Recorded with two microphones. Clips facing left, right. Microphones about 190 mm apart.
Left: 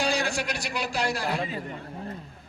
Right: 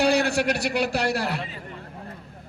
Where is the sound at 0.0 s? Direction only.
60° right (ahead or behind).